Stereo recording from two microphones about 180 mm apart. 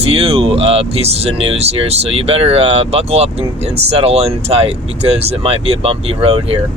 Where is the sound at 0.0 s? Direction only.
30° right (ahead or behind).